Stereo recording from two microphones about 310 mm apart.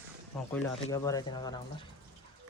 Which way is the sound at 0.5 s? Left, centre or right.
Centre.